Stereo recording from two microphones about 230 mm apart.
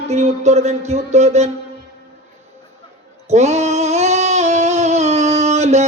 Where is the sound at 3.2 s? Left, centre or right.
Right.